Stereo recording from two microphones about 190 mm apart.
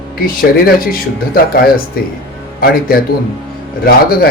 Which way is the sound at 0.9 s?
50° left (ahead or behind).